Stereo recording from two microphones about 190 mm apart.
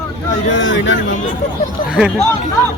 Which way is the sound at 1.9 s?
5° right (ahead or behind).